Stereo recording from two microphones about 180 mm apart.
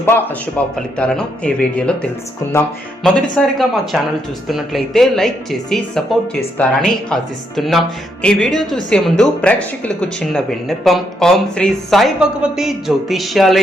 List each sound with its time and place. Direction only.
0.0 s speech: 10° left (ahead or behind)